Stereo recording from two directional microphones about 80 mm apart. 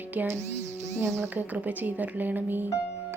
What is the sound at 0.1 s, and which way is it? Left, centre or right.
Speech, right.